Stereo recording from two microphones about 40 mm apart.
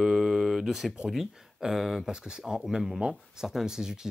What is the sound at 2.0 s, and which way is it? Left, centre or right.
Speech, centre.